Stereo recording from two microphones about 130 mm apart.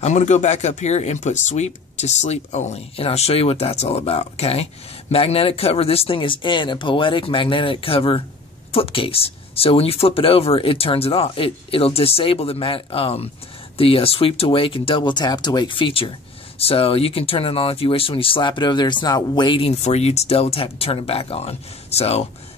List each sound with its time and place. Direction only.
0.0 s speech: 65° left (ahead or behind); by 19.7 s 40° left (ahead or behind)
19.7 s speech: 55° left (ahead or behind)